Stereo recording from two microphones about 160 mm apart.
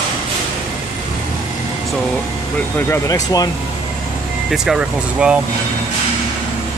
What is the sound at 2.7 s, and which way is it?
Speech, 15° left (ahead or behind).